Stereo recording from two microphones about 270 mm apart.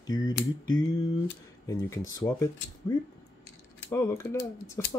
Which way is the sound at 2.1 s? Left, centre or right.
Centre.